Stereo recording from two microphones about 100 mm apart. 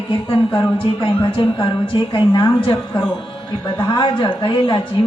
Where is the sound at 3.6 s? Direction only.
50° left (ahead or behind).